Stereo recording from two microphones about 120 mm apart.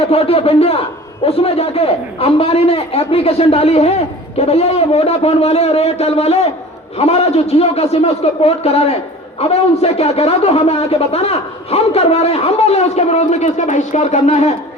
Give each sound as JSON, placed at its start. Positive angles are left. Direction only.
{"t": 0.1, "sound": "speech", "side_deg": 55}